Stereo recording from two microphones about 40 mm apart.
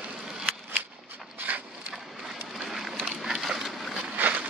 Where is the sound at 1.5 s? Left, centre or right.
Right.